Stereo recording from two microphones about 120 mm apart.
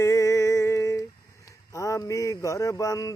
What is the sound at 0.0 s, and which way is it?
Humming, 25° left (ahead or behind).